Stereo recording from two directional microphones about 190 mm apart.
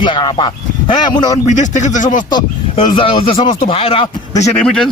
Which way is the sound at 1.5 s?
40° left (ahead or behind).